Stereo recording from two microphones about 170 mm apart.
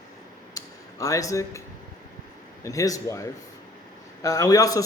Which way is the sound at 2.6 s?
20° left (ahead or behind).